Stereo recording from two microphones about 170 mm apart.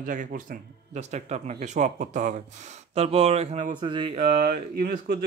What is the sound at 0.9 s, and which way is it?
A man's voice, 40° right (ahead or behind).